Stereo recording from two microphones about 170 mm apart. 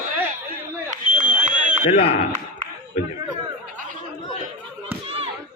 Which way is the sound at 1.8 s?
35° left (ahead or behind).